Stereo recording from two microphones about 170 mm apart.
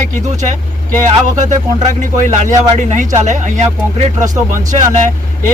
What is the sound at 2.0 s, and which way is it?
Speech, 45° right (ahead or behind).